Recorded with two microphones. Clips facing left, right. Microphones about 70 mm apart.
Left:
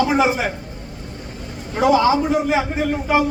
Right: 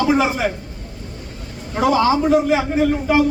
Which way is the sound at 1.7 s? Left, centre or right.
Centre.